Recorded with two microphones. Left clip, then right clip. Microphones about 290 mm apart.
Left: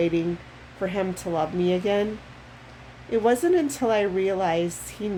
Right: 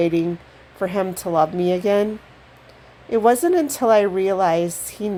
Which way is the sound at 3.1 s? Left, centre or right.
Right.